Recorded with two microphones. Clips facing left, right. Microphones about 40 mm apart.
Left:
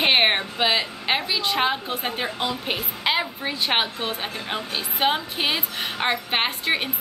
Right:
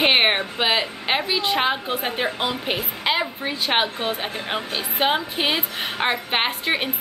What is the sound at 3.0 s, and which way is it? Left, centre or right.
Speech, centre.